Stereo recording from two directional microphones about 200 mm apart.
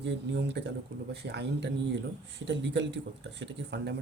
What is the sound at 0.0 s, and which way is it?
Speech, 60° right (ahead or behind).